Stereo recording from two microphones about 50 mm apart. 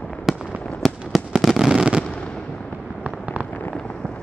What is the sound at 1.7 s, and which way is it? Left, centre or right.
Fireworks, centre.